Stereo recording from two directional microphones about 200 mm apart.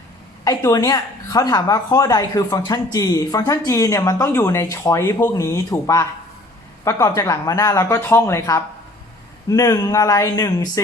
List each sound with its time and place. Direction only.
0.4 s speech: 20° left (ahead or behind)